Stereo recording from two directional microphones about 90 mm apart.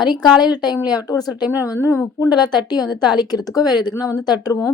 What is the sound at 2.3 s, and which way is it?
A woman's voice, 50° left (ahead or behind).